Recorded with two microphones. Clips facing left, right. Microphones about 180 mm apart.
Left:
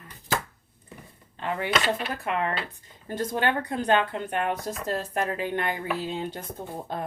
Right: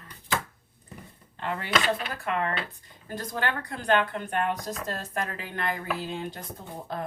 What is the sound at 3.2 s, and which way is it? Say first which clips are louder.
Speech: left 5 dB; 20° left (ahead or behind).